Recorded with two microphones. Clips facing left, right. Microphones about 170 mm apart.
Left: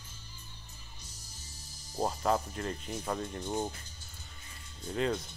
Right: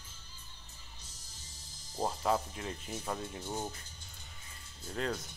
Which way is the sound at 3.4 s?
15° left (ahead or behind).